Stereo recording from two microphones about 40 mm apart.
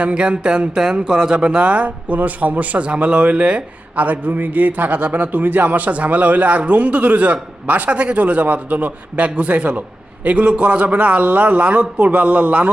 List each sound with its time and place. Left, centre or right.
0.0 s speech: right
3.9 s speech: right